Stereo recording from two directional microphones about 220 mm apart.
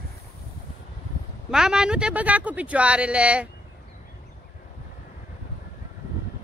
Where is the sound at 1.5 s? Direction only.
5° right (ahead or behind).